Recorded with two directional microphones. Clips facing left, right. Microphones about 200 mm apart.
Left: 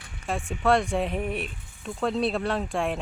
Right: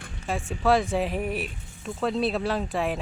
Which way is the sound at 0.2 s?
Centre (ahead or behind).